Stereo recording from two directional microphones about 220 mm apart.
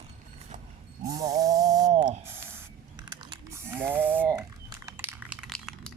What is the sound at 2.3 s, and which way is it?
Spray, 10° right (ahead or behind).